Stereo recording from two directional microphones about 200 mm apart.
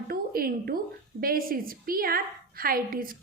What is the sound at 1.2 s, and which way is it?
A woman's voice, 45° right (ahead or behind).